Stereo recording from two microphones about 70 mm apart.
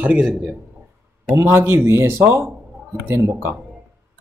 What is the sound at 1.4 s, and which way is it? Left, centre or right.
Mantra, right.